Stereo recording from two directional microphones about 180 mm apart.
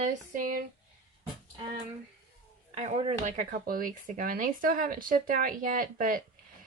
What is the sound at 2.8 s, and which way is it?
Speech, 35° right (ahead or behind).